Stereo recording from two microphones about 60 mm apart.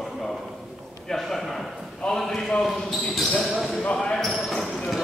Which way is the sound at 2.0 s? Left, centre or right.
Centre.